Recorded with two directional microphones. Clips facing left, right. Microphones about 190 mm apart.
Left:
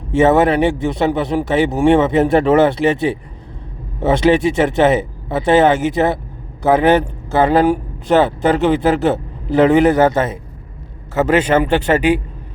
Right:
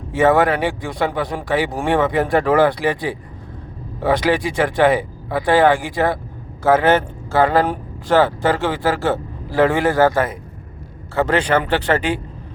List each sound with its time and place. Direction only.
0.1 s speech: 20° left (ahead or behind)